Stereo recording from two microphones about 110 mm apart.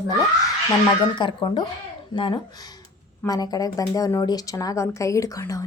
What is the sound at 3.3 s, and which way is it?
Speech, 35° left (ahead or behind).